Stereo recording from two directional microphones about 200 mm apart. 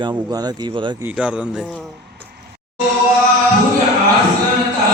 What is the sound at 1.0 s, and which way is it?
Speech, 5° right (ahead or behind).